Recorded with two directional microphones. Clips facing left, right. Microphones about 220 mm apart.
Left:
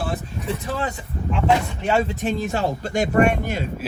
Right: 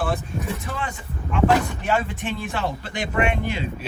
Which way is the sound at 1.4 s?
25° left (ahead or behind).